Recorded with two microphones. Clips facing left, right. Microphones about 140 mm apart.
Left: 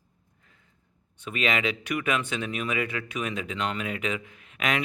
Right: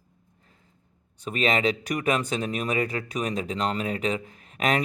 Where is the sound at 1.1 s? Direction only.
35° right (ahead or behind).